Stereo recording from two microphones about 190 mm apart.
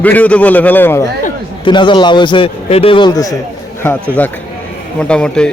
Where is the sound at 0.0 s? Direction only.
10° left (ahead or behind).